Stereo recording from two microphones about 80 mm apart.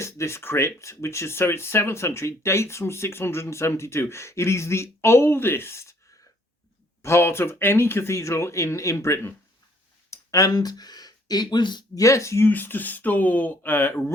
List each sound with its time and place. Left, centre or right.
0.0 s speech: left
7.0 s speech: left
11.9 s speech: left
12.5 s speech: left